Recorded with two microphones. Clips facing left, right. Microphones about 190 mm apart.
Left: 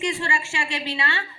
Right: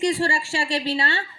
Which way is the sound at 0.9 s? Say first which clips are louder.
Right 4 dB; 30° right (ahead or behind).